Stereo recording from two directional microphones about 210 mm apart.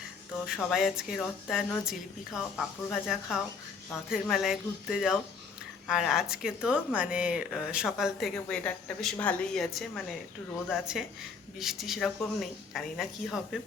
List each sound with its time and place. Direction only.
0.4 s speech: centre (ahead or behind)